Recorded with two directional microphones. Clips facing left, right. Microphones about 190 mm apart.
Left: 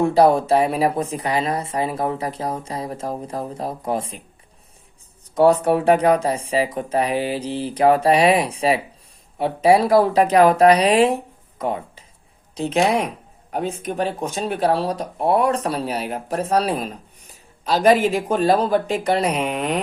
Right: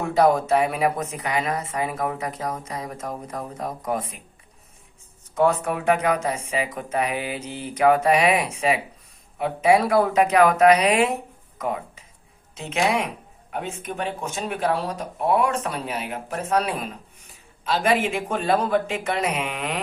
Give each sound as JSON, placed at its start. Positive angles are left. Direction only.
{"t": 0.0, "sound": "speech", "side_deg": 30}
{"t": 5.3, "sound": "speech", "side_deg": 35}